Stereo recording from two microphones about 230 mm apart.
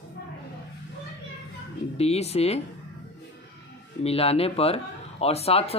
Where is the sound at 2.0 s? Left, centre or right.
Left.